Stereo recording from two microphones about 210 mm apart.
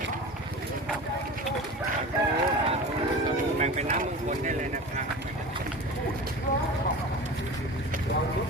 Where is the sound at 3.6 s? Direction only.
35° right (ahead or behind).